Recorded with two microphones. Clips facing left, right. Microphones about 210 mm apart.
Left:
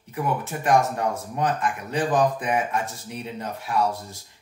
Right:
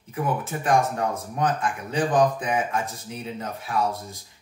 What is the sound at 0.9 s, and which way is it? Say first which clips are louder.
Speech: even; centre (ahead or behind).